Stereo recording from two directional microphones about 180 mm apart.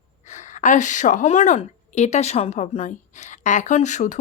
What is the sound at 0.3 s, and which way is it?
A woman's voice, 40° left (ahead or behind).